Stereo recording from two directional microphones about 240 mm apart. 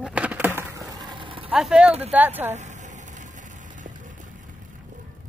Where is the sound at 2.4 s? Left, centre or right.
Right.